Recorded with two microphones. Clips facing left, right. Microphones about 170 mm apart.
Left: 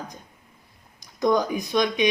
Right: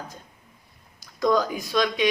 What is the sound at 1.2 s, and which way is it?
Speech, 20° left (ahead or behind).